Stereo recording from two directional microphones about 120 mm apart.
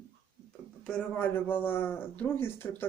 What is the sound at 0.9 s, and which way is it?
A man's voice, 10° left (ahead or behind).